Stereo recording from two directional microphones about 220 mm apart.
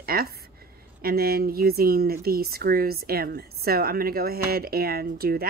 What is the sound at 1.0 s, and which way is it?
Speech, 45° right (ahead or behind).